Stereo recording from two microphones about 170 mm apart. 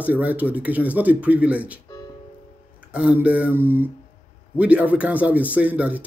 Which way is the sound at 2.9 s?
5° right (ahead or behind).